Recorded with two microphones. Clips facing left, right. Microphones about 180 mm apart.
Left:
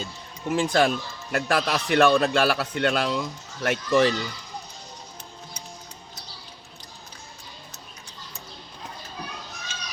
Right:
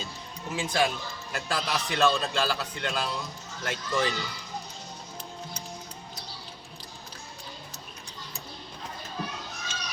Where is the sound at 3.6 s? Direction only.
70° left (ahead or behind).